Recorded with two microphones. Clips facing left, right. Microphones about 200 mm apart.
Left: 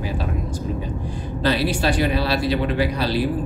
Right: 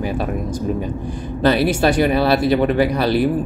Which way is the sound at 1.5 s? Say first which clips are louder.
Right 5 dB; 55° right (ahead or behind).